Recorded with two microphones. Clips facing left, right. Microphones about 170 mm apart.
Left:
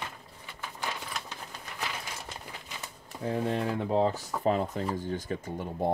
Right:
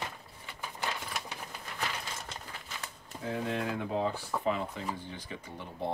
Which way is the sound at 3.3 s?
35° left (ahead or behind).